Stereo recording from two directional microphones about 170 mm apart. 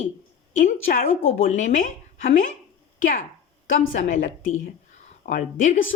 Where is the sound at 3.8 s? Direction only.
50° left (ahead or behind).